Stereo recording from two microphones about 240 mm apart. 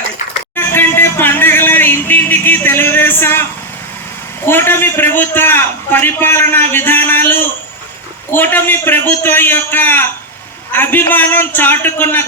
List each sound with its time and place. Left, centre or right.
0.5 s music: centre
4.4 s a man's voice: centre